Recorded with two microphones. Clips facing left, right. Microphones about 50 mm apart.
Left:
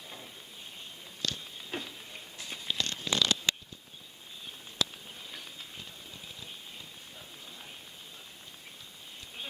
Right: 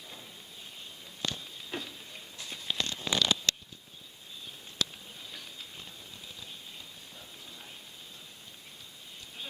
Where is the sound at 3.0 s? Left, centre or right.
Centre.